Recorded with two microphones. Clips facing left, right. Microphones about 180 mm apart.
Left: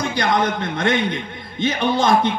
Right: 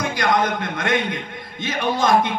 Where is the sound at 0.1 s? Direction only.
30° left (ahead or behind).